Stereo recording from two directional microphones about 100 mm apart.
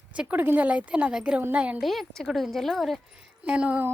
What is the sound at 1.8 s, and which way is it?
Speech, centre (ahead or behind).